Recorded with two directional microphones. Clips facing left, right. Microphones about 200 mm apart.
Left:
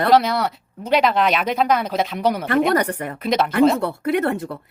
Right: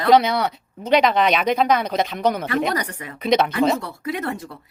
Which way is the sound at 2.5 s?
55° left (ahead or behind).